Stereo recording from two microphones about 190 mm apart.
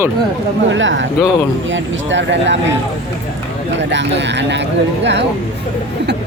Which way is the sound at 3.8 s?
70° right (ahead or behind).